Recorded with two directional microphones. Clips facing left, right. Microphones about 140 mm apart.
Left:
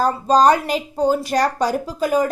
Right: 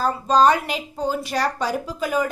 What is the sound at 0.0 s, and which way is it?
A woman's voice, 40° left (ahead or behind).